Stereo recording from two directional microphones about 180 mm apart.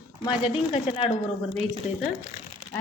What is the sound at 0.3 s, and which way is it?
Speech, 30° left (ahead or behind).